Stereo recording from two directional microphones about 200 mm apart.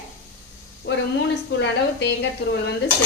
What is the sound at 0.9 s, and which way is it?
A woman's voice, 65° left (ahead or behind).